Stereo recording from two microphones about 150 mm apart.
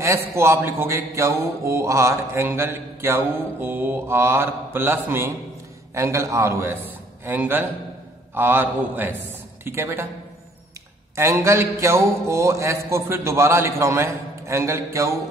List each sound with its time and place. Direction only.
0.0 s mantra: 20° right (ahead or behind)
5.9 s a man's voice: 20° right (ahead or behind)
8.4 s mantra: 10° right (ahead or behind)
9.2 s a woman's voice: 15° right (ahead or behind)
11.1 s music: 20° right (ahead or behind)